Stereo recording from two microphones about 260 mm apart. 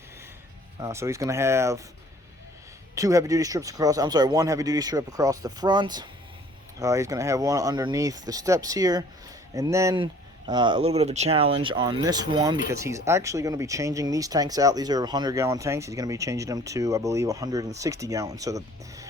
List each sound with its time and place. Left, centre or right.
0.8 s speech: centre
2.9 s speech: centre